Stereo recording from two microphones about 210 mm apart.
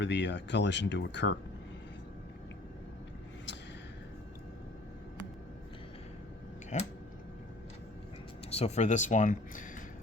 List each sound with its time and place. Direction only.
0.0 s speech: 55° left (ahead or behind)
6.7 s a sound: 35° left (ahead or behind)
8.4 s speech: 30° left (ahead or behind)